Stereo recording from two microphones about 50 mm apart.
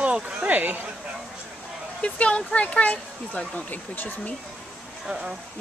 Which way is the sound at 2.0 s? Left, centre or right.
Left.